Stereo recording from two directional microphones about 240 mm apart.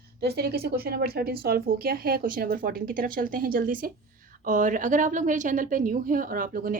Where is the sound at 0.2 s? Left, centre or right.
Right.